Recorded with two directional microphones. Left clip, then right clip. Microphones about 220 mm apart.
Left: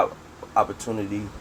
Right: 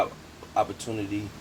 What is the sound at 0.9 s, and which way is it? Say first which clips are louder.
Speech: left 4 dB; 25° left (ahead or behind).